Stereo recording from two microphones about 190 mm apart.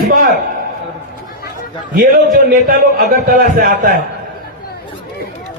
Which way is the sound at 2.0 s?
50° right (ahead or behind).